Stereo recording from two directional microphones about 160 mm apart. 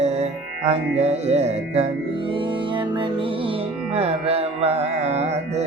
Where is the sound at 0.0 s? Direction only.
40° right (ahead or behind).